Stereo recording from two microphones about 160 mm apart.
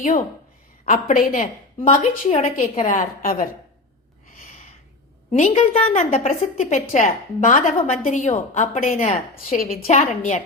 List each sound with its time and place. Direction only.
0.9 s a woman's voice: 55° left (ahead or behind)
1.9 s a woman's voice: 40° left (ahead or behind); by 3.5 s 60° left (ahead or behind)
4.4 s a sound: 50° left (ahead or behind)
5.3 s a woman's voice: 50° left (ahead or behind)
9.6 s a woman's voice: 45° left (ahead or behind)